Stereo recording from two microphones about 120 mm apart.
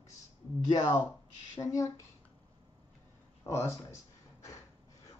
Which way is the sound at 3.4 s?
20° left (ahead or behind).